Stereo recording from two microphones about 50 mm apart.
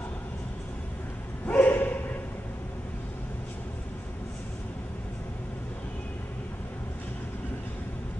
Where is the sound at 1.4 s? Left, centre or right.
Left.